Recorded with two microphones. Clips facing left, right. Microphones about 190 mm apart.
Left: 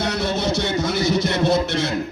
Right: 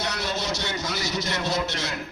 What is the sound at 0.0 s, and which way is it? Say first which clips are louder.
Music: left 7 dB; 55° left (ahead or behind).